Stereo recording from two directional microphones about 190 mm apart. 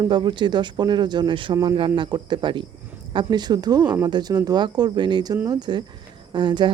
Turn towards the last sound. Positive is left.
turn(degrees=-25)  # may be behind; listen again after turning